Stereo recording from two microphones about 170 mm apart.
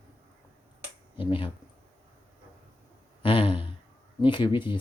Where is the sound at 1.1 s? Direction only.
30° left (ahead or behind).